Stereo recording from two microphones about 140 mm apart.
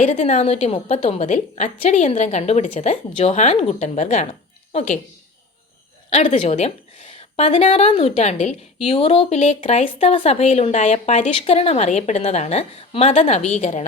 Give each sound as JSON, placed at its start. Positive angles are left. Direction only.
{"t": 0.0, "sound": "a woman's voice", "side_deg": 55}
{"t": 6.1, "sound": "a woman's voice", "side_deg": 50}